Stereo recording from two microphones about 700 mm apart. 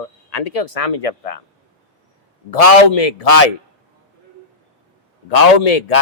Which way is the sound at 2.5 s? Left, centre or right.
Left.